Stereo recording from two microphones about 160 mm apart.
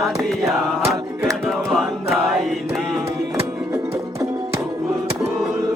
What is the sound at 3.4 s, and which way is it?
Music, 20° right (ahead or behind).